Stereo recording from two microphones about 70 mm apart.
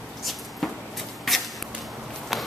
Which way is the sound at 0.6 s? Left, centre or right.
Centre.